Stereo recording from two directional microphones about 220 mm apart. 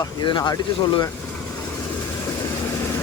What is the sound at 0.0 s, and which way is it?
Speech, 20° left (ahead or behind).